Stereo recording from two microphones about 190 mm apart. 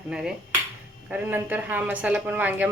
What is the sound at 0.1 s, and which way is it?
Speech, 5° right (ahead or behind).